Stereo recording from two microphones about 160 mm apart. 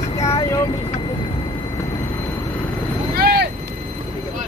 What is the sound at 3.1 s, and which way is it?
Vehicle, 80° right.